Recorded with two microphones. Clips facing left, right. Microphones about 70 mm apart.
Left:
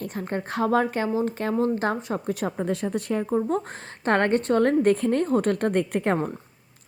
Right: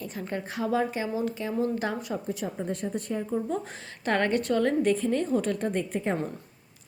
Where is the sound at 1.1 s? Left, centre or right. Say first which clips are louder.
Left 4 dB; left.